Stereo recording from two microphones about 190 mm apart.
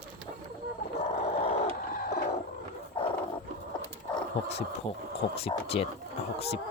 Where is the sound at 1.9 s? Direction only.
55° left (ahead or behind).